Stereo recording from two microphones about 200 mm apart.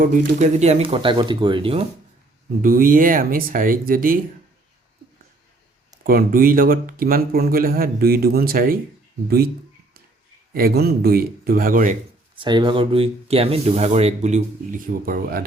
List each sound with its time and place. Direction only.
0.3 s speech: 35° right (ahead or behind)
2.6 s speech: 45° right (ahead or behind)
6.0 s speech: 45° right (ahead or behind)
10.5 s speech: 50° right (ahead or behind)
12.4 s speech: 25° right (ahead or behind); by 15.4 s 45° right (ahead or behind)